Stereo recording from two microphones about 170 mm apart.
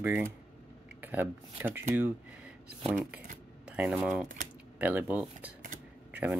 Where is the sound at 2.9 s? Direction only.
Centre (ahead or behind).